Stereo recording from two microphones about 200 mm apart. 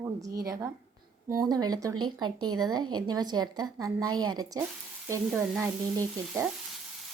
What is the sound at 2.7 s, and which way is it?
A woman's voice, 20° right (ahead or behind).